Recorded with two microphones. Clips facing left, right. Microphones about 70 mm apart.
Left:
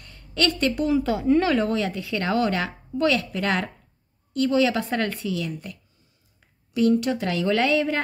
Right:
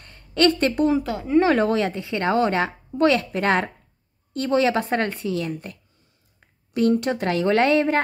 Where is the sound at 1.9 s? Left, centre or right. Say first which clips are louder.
Right 3 dB; right.